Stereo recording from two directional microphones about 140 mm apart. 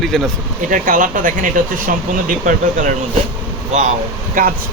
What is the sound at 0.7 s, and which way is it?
Speech, 70° right (ahead or behind).